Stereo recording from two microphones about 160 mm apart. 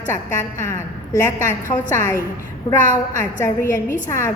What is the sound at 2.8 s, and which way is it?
Speech, 55° left (ahead or behind).